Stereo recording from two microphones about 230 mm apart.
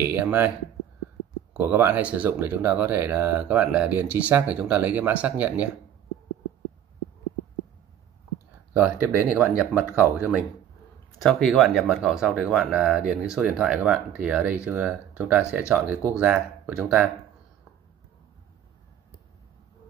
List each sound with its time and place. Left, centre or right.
0.0 s speech: centre
1.5 s speech: centre
9.0 s speech: centre